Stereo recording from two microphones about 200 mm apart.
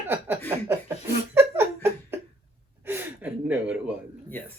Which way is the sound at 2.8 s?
10° right (ahead or behind).